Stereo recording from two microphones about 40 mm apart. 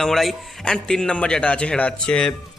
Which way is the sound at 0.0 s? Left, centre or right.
Centre.